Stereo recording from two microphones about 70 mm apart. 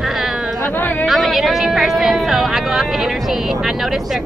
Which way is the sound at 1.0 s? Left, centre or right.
Centre.